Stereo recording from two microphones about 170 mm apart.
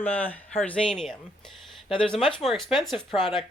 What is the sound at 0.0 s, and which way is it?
Speech, 10° left (ahead or behind).